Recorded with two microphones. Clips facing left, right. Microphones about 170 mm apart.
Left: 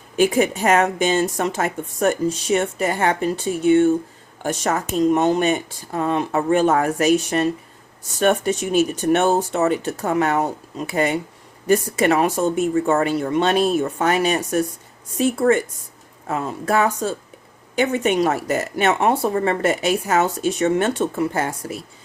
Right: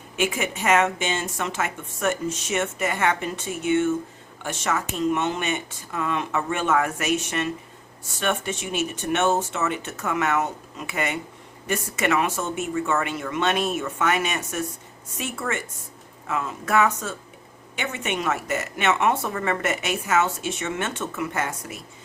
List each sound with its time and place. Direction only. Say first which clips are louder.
0.2 s speech: left 8 dB; 35° left (ahead or behind)